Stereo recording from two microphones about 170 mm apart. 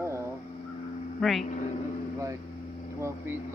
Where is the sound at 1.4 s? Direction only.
45° left (ahead or behind).